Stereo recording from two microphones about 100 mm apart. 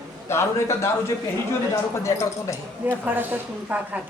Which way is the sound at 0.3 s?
25° left (ahead or behind).